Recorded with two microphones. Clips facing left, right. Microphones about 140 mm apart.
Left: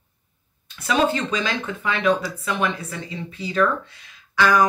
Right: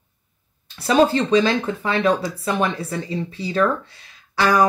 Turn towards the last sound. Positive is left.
turn(degrees=-35)  # may be behind; listen again after turning